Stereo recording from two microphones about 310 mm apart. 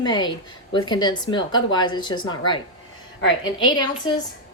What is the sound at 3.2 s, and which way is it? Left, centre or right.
Speech, left.